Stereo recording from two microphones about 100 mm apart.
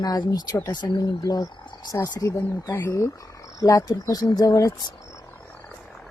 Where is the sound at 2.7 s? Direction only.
25° left (ahead or behind); by 4.9 s 40° left (ahead or behind).